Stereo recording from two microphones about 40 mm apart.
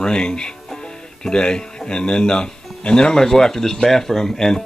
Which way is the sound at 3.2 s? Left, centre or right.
Centre.